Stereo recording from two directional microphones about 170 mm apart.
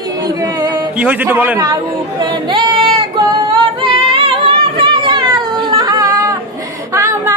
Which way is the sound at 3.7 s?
35° right (ahead or behind).